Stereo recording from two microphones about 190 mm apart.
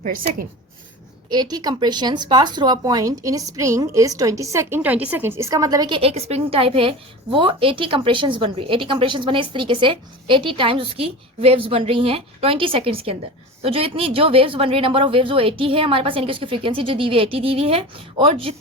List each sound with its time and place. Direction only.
0.0 s a woman's voice: 45° right (ahead or behind)
1.3 s speech: 20° right (ahead or behind)